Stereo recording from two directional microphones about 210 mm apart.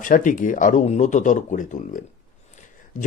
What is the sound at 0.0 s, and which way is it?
A man's voice, 40° left (ahead or behind).